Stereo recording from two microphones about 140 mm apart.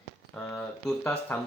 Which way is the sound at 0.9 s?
5° left (ahead or behind).